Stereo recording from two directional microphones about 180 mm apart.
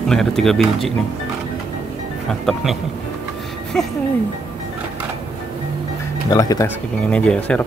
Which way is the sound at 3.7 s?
5° left (ahead or behind).